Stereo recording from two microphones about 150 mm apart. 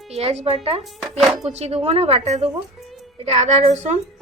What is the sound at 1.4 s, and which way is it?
Speech, 45° right (ahead or behind).